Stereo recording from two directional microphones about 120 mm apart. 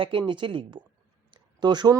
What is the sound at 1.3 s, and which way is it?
Clicking, 35° right (ahead or behind).